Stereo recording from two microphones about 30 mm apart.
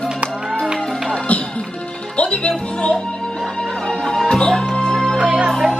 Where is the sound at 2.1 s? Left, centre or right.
Left.